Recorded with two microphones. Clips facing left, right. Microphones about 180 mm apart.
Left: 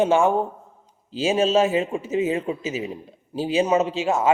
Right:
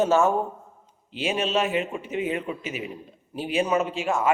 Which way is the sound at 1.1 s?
30° left (ahead or behind).